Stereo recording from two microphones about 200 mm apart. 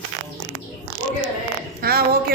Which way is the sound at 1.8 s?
50° right (ahead or behind).